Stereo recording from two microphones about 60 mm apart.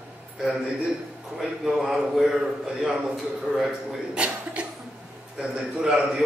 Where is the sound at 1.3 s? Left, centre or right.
Centre.